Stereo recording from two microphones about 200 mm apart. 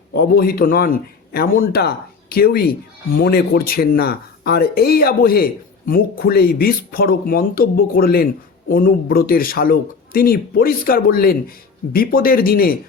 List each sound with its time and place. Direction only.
0.1 s speech: 50° left (ahead or behind)